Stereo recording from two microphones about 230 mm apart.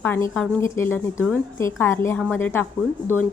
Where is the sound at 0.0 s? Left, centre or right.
Centre.